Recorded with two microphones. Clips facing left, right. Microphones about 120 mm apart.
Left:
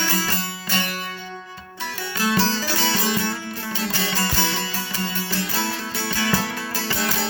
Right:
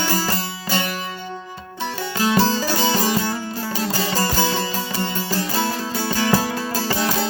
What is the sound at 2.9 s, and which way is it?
Music, 40° right (ahead or behind).